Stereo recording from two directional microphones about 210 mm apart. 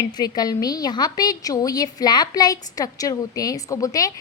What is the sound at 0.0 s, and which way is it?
A woman's voice, 20° left (ahead or behind).